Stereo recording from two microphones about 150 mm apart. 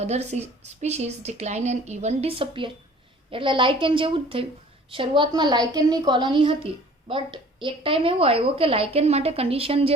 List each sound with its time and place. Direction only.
0.0 s a woman's voice: 45° right (ahead or behind)